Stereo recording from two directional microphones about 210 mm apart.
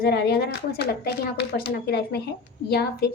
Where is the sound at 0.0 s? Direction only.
50° left (ahead or behind).